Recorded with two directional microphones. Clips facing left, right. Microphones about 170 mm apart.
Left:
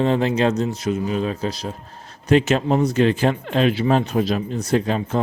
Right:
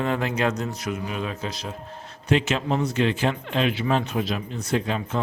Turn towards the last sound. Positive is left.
turn(degrees=40)  # may be behind; listen again after turning